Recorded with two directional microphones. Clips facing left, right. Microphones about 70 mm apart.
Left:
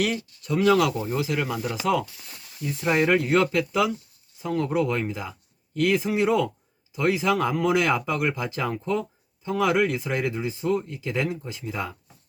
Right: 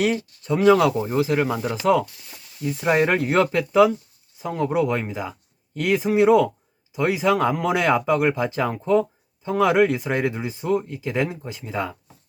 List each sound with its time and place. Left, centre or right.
0.0 s speech: right